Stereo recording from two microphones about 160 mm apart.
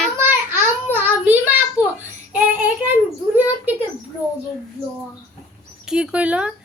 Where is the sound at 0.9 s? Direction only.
10° right (ahead or behind).